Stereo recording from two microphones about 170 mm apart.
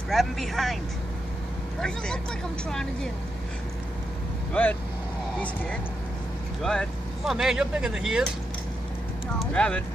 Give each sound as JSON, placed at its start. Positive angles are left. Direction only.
{"t": 0.1, "sound": "speech", "side_deg": 0}
{"t": 1.8, "sound": "speech", "side_deg": 5}
{"t": 4.6, "sound": "speech", "side_deg": 10}
{"t": 9.4, "sound": "speech", "side_deg": 5}